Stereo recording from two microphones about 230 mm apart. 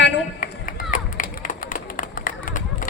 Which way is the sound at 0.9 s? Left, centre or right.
Left.